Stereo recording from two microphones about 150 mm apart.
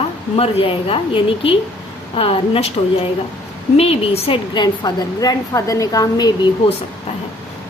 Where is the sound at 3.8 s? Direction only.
40° left (ahead or behind); by 6.3 s 25° left (ahead or behind).